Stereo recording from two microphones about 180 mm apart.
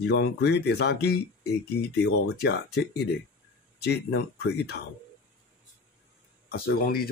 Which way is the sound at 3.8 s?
65° left (ahead or behind).